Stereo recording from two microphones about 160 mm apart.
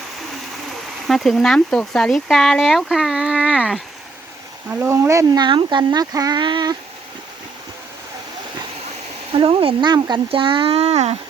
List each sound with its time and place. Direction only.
1.0 s speech: centre (ahead or behind); by 6.7 s 30° right (ahead or behind)
9.3 s speech: 35° right (ahead or behind)